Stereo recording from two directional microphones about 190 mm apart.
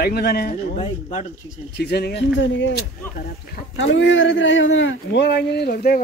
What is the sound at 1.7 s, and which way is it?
Speech, 60° left (ahead or behind).